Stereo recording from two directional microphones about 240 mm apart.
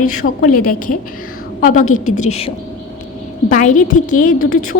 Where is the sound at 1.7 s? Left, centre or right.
Left.